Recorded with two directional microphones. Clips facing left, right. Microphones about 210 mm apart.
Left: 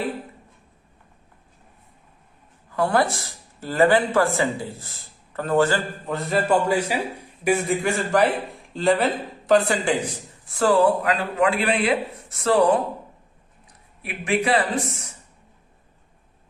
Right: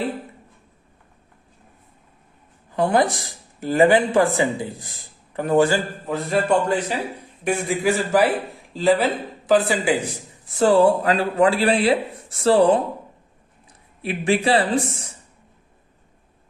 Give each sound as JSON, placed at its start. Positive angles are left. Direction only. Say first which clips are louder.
{"t": 2.7, "sound": "speech", "louder": "right 2 dB", "side_deg": -20}
{"t": 6.1, "sound": "speech", "louder": "right 1 dB", "side_deg": 0}
{"t": 10.5, "sound": "a man's voice", "louder": "right 3 dB", "side_deg": -25}
{"t": 14.0, "sound": "a man's voice", "louder": "right 3 dB", "side_deg": -30}